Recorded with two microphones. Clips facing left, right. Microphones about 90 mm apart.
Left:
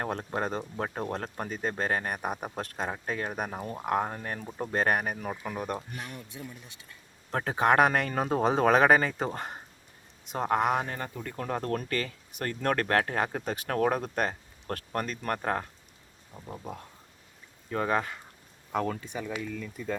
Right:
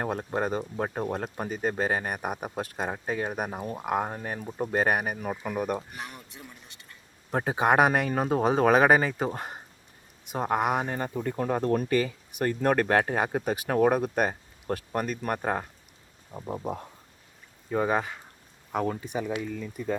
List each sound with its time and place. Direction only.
0.0 s speech: 10° right (ahead or behind)
7.3 s speech: 15° right (ahead or behind)
10.9 s speech: 25° right (ahead or behind)
16.3 s speech: 25° right (ahead or behind)
17.7 s speech: 15° right (ahead or behind)